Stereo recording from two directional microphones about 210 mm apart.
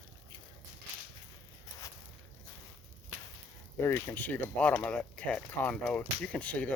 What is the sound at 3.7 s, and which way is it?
Speech, 10° left (ahead or behind).